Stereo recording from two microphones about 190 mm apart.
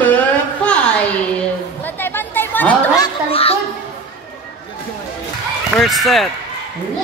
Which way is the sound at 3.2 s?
30° left (ahead or behind).